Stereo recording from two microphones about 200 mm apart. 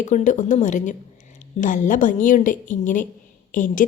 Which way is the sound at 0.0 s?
40° left (ahead or behind).